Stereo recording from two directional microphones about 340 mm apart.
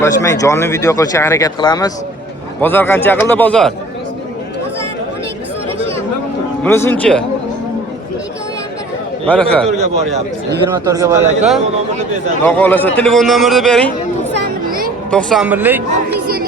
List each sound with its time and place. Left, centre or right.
0.0 s a man's voice: centre
6.6 s a man's voice: centre
9.2 s a man's voice: centre
9.7 s speech: right
10.8 s speech: centre
12.5 s a man's voice: centre
14.3 s a sound: right
15.1 s a man's voice: centre
16.2 s music: right